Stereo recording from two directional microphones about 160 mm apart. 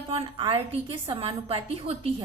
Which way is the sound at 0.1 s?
35° right (ahead or behind).